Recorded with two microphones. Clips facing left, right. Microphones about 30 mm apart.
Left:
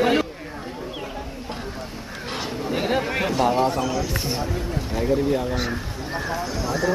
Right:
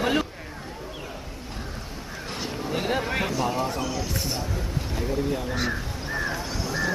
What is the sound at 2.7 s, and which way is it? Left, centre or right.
Speech, centre.